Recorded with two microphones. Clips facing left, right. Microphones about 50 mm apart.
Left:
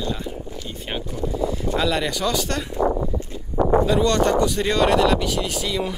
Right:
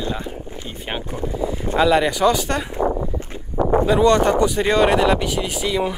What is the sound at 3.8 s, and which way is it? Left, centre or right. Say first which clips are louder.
Speech: right 4 dB; centre.